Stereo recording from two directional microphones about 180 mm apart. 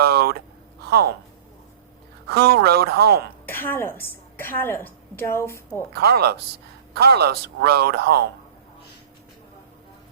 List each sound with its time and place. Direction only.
0.0 s a sound: 60° right (ahead or behind)
2.2 s speech: 60° right (ahead or behind)
3.4 s a woman's voice: 10° left (ahead or behind)
5.9 s speech: 60° right (ahead or behind)